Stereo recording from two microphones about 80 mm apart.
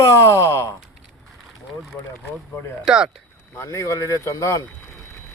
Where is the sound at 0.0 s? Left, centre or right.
Left.